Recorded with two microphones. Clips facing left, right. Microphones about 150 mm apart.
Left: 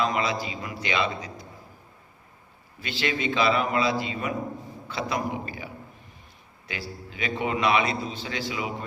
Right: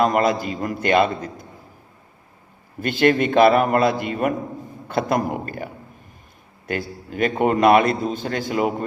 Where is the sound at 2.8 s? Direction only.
50° right (ahead or behind).